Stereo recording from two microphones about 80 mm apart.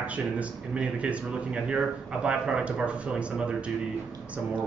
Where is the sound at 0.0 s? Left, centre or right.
Centre.